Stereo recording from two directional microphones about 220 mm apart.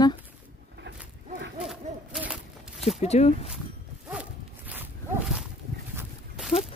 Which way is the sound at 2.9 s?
30° left (ahead or behind).